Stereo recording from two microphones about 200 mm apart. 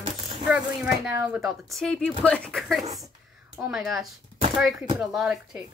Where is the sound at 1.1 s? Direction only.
15° right (ahead or behind).